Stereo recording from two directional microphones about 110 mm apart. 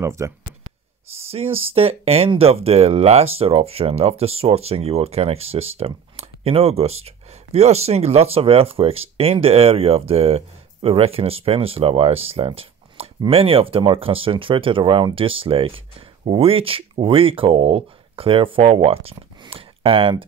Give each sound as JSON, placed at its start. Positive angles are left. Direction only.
{"t": 0.0, "sound": "speech", "side_deg": -25}
{"t": 1.3, "sound": "speech", "side_deg": -60}